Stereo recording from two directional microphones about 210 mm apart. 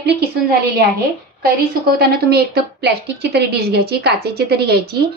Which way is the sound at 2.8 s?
50° right (ahead or behind).